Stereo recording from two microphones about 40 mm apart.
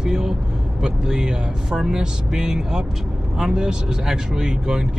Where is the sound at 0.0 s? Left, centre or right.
Centre.